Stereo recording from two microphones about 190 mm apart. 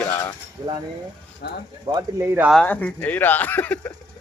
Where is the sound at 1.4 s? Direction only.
60° left (ahead or behind).